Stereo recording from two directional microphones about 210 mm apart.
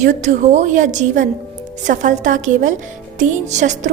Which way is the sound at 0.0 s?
35° right (ahead or behind).